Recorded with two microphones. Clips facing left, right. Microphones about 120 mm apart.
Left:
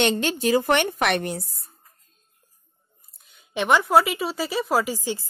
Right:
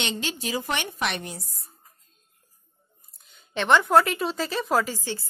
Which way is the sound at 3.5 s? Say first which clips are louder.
Left 1 dB; 10° left (ahead or behind).